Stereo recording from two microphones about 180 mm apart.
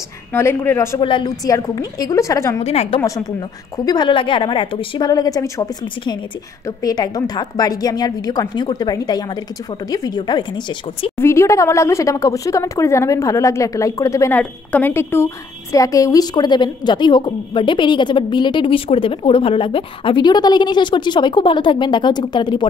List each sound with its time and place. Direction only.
0.3 s a woman's voice: 10° left (ahead or behind)
1.0 s a woman's voice: 25° left (ahead or behind)
2.6 s a woman's voice: 35° left (ahead or behind)
3.0 s a woman's voice: 20° left (ahead or behind)